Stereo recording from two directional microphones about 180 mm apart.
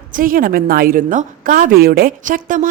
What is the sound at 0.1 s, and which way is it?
A woman's voice, 50° right (ahead or behind).